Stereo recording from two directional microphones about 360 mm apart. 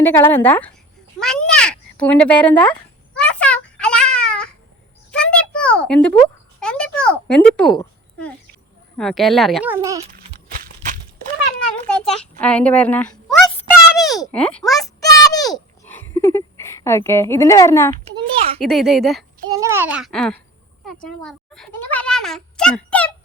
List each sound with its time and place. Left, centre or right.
0.0 s a child's voice: centre
3.2 s a sound: centre
6.1 s a child's voice: centre
12.1 s speech: centre
14.2 s a sound: centre
17.9 s a child's voice: centre
18.6 s a child's voice: centre